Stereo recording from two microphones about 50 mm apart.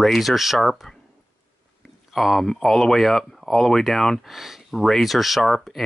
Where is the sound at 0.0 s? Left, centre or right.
Centre.